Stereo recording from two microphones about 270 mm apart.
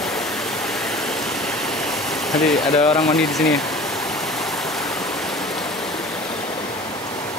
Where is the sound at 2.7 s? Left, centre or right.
Left.